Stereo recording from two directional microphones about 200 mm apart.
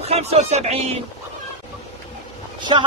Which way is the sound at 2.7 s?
25° right (ahead or behind).